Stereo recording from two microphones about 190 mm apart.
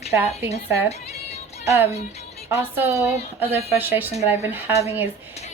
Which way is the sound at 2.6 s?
10° right (ahead or behind).